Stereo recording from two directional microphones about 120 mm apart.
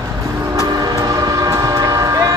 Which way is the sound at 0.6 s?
30° right (ahead or behind).